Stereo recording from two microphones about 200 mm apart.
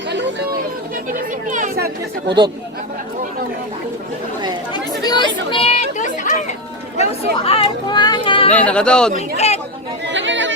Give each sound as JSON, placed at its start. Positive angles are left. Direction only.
{"t": 0.1, "sound": "chatter", "side_deg": -60}
{"t": 1.5, "sound": "chatter", "side_deg": -40}
{"t": 2.2, "sound": "speech", "side_deg": -20}
{"t": 4.7, "sound": "chatter", "side_deg": 20}
{"t": 7.4, "sound": "speech", "side_deg": 30}
{"t": 8.5, "sound": "speech", "side_deg": 5}
{"t": 9.1, "sound": "speech", "side_deg": 35}
{"t": 10.1, "sound": "chatter", "side_deg": -65}